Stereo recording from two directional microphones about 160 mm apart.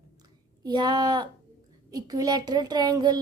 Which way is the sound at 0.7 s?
25° right (ahead or behind).